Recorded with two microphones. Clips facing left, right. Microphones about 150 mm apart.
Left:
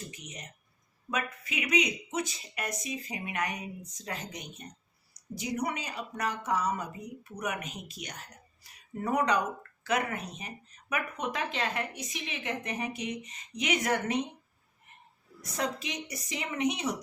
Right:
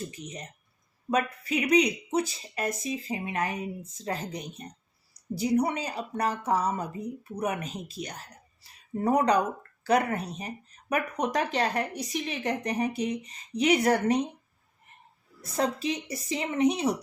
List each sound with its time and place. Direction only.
0.1 s speech: 30° right (ahead or behind)
15.4 s speech: 30° right (ahead or behind)